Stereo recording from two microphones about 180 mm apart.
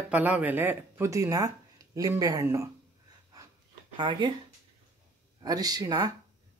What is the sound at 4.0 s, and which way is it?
Speech, 25° right (ahead or behind).